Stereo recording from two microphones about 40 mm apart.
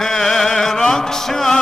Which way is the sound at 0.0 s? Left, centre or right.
Centre.